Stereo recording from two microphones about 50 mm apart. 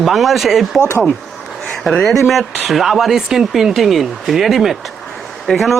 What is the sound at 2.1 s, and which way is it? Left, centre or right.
Speech, centre.